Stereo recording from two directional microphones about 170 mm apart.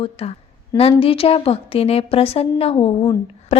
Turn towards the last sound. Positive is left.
turn(degrees=30)  # may be behind; listen again after turning